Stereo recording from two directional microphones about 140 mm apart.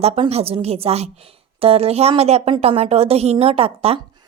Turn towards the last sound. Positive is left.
turn(degrees=-45)  # may be behind; listen again after turning